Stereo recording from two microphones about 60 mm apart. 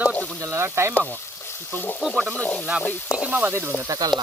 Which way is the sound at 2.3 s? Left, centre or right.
Left.